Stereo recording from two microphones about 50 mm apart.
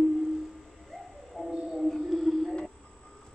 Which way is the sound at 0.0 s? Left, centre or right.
Centre.